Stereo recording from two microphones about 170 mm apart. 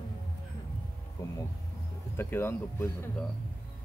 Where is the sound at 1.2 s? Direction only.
20° left (ahead or behind).